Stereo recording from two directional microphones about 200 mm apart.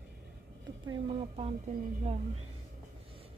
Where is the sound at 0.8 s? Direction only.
25° right (ahead or behind).